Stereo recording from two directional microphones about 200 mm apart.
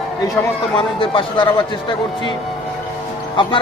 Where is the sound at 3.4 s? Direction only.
25° left (ahead or behind).